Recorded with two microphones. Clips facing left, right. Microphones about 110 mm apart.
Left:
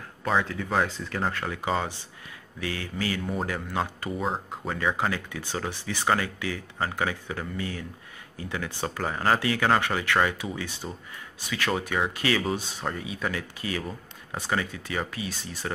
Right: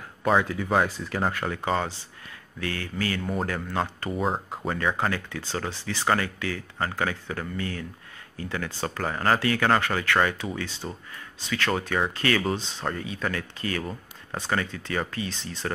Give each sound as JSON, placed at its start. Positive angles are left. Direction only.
{"t": 0.2, "sound": "speech", "side_deg": -5}
{"t": 1.6, "sound": "speech", "side_deg": 10}
{"t": 4.2, "sound": "speech", "side_deg": 0}
{"t": 4.9, "sound": "speech", "side_deg": 15}